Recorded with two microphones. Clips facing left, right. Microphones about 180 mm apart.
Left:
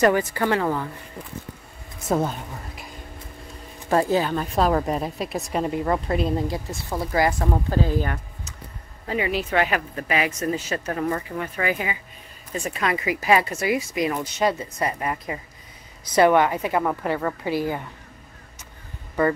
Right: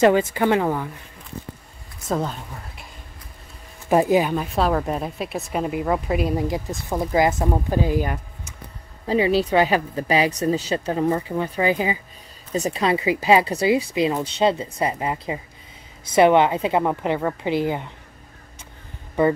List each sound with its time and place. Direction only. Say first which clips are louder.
0.0 s a woman's voice: right 3 dB; 25° right (ahead or behind)
2.0 s speech: left 2 dB; 5° left (ahead or behind)
3.9 s a woman's voice: right 3 dB; 15° right (ahead or behind)
9.0 s speech: right 6 dB; 30° right (ahead or behind)